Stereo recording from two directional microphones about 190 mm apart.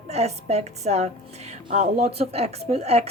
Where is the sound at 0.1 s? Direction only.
35° right (ahead or behind).